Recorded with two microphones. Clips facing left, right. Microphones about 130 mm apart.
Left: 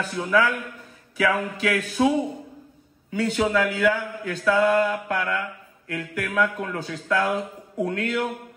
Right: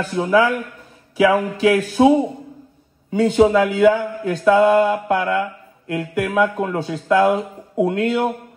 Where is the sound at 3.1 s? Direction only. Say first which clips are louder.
Right 8 dB; 35° right (ahead or behind).